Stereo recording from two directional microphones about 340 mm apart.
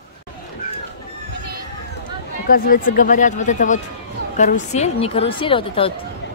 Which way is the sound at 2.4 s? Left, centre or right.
Left.